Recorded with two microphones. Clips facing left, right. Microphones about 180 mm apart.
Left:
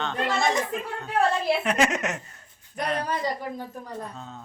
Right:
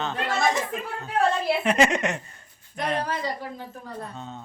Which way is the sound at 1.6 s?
Centre (ahead or behind).